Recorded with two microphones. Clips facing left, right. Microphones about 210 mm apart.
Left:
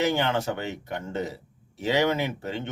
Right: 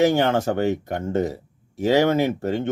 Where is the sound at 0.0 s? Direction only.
45° right (ahead or behind).